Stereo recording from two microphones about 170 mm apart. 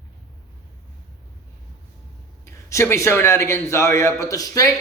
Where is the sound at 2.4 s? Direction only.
15° left (ahead or behind).